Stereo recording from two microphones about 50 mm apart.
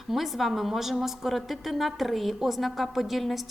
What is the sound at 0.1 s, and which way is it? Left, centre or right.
A woman's voice, centre.